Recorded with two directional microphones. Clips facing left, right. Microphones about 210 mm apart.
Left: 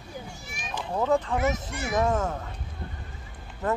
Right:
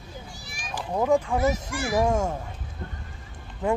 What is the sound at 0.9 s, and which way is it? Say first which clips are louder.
Speech: right 2 dB; 10° right (ahead or behind).